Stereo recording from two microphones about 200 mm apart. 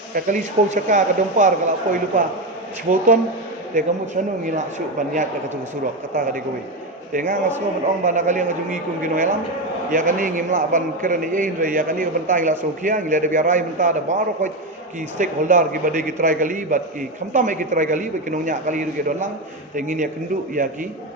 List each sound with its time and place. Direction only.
0.1 s a man's voice: 40° right (ahead or behind)
7.1 s a man's voice: 40° right (ahead or behind)